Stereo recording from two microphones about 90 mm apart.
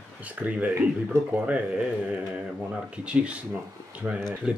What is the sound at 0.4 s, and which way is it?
Speech, 20° right (ahead or behind).